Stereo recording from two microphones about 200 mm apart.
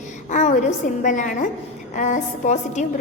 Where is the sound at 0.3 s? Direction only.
35° left (ahead or behind).